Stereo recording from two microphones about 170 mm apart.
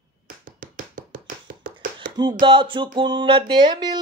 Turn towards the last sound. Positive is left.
turn(degrees=-25)  # may be behind; listen again after turning